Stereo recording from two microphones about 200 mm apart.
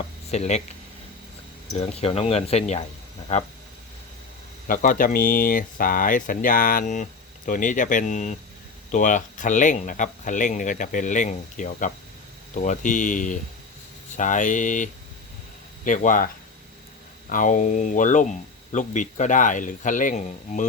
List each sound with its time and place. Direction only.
0.3 s speech: 35° left (ahead or behind)
1.8 s speech: 30° left (ahead or behind)
4.7 s speech: 45° left (ahead or behind)